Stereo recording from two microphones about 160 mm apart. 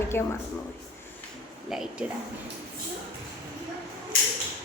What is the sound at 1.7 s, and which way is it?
Speech, 5° right (ahead or behind).